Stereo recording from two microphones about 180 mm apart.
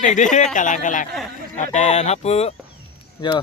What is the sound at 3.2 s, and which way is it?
Speech, 25° left (ahead or behind).